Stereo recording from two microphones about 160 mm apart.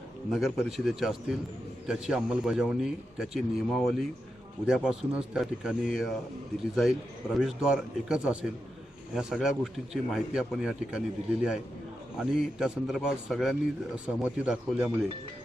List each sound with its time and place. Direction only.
0.3 s a man's voice: centre (ahead or behind)
12.2 s a man's voice: 5° right (ahead or behind)